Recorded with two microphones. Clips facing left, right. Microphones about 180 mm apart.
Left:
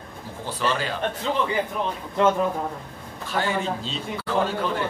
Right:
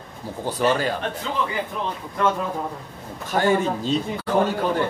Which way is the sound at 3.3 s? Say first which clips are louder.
Right 5 dB; 45° right (ahead or behind).